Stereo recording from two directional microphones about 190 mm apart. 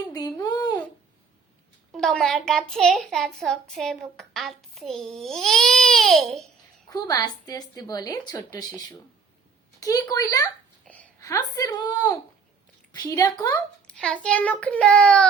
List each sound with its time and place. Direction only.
0.1 s a sound: 20° left (ahead or behind)
1.9 s a child's voice: 5° left (ahead or behind)
6.9 s a woman's voice: 20° left (ahead or behind)
10.8 s a sound: 5° left (ahead or behind)
11.2 s a woman's voice: 20° left (ahead or behind)
13.8 s a child's voice: 5° left (ahead or behind)